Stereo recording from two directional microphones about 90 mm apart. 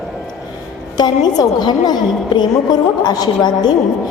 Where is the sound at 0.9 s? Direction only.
50° left (ahead or behind).